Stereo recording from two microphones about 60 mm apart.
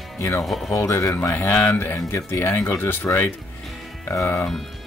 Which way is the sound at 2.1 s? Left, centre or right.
Left.